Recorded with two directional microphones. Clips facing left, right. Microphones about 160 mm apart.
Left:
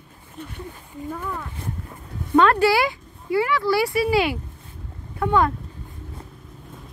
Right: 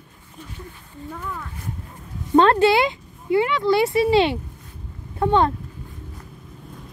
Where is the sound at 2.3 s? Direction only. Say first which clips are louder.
Right 2 dB; 25° right (ahead or behind).